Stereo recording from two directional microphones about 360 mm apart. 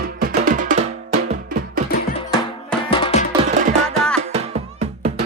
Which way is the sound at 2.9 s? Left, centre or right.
Centre.